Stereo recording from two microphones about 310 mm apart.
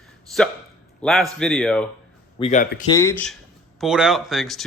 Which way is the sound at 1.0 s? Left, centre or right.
Centre.